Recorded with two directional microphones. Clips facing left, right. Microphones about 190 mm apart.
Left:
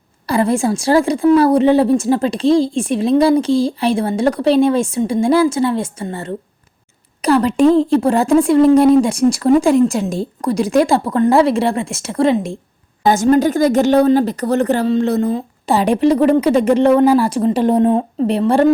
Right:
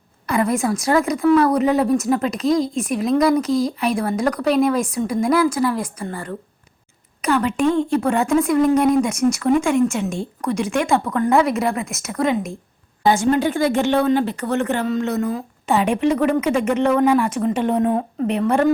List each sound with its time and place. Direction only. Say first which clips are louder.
0.3 s a woman's voice: left 4 dB; 30° left (ahead or behind)
7.2 s a woman's voice: left 6 dB; 35° left (ahead or behind)
13.1 s a woman's voice: left 4 dB; 40° left (ahead or behind)